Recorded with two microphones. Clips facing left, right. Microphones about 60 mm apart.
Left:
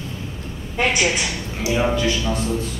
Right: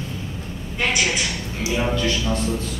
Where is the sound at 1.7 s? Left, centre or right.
Centre.